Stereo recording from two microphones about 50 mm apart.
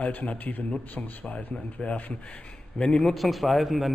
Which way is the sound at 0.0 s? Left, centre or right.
Left.